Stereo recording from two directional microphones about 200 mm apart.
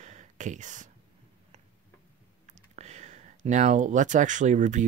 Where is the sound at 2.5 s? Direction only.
35° right (ahead or behind).